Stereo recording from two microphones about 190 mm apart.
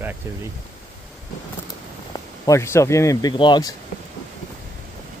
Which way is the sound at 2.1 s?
15° left (ahead or behind).